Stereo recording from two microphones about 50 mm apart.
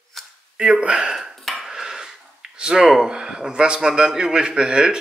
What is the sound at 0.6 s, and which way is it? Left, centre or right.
Speech, right.